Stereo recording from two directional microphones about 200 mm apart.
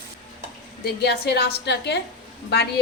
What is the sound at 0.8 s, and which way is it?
Speech, 55° left (ahead or behind).